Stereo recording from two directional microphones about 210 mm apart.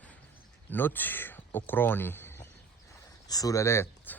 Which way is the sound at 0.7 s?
10° left (ahead or behind).